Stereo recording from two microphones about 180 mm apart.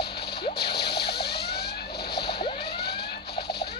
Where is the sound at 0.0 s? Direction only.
65° left (ahead or behind).